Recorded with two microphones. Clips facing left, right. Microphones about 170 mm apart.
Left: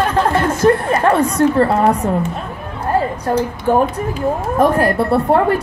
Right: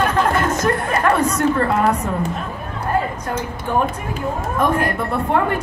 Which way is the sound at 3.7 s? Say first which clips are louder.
Left 5 dB; 40° left (ahead or behind).